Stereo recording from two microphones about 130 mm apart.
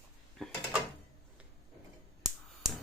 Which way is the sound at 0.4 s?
Centre (ahead or behind).